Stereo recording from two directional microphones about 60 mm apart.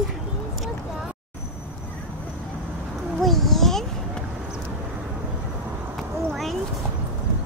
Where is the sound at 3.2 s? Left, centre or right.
Centre.